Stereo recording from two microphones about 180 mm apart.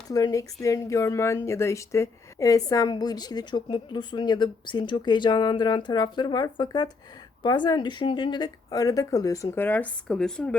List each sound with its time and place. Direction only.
0.1 s a woman's voice: 20° left (ahead or behind)